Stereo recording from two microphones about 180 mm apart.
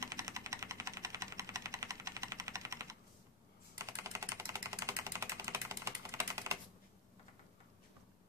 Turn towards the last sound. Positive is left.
turn(degrees=-15)  # may be behind; listen again after turning